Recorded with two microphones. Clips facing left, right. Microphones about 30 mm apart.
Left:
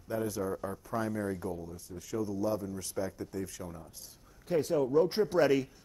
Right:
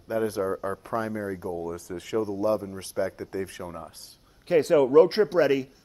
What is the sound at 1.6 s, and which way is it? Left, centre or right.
Speech, right.